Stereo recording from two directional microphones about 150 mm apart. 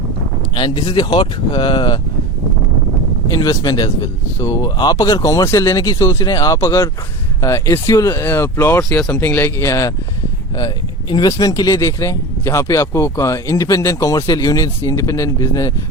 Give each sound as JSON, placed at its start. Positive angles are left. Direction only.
{"t": 0.5, "sound": "speech", "side_deg": 30}
{"t": 3.2, "sound": "speech", "side_deg": 25}
{"t": 11.1, "sound": "speech", "side_deg": 25}